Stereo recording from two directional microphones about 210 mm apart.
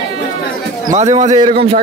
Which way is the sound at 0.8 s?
35° right (ahead or behind).